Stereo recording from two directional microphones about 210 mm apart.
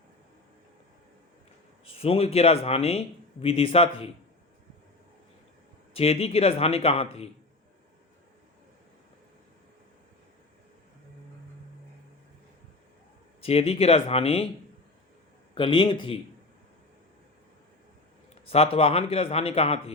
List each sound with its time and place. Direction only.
1.8 s a man's voice: 25° left (ahead or behind)
5.9 s a man's voice: 30° left (ahead or behind)
13.4 s a man's voice: 30° left (ahead or behind)
15.5 s a man's voice: 25° left (ahead or behind)
18.4 s a man's voice: 30° left (ahead or behind)